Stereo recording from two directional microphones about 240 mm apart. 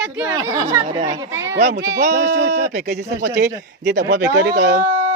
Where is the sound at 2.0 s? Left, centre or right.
Right.